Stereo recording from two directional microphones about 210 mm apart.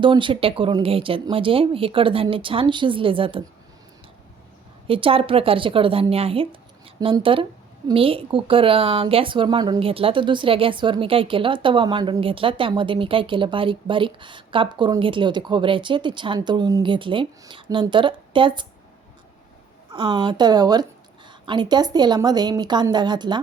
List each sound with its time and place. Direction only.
0.0 s a woman's voice: 25° right (ahead or behind)
4.9 s a woman's voice: 25° right (ahead or behind)
19.9 s a woman's voice: 25° right (ahead or behind)